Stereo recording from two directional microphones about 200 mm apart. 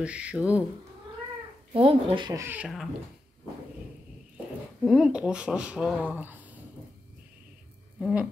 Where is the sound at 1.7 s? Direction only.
25° right (ahead or behind); by 2.8 s 5° right (ahead or behind).